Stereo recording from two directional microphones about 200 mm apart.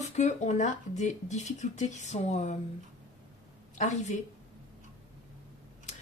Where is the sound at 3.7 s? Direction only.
35° left (ahead or behind).